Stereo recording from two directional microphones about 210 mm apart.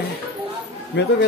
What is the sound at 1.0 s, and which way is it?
Speech, 55° left (ahead or behind).